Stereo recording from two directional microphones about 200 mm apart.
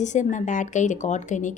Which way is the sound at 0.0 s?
35° left (ahead or behind).